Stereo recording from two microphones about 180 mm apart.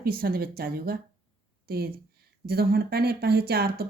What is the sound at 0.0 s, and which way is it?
Speech, 55° right (ahead or behind).